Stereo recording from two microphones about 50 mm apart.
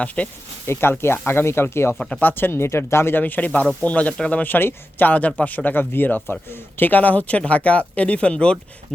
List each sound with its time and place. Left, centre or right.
0.2 s speech: left
0.7 s speech: left
2.0 s speech: centre
2.2 s speech: left
3.2 s speech: left
4.4 s speech: left